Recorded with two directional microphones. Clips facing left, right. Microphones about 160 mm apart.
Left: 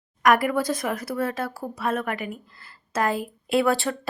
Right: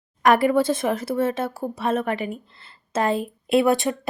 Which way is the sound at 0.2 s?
30° right (ahead or behind).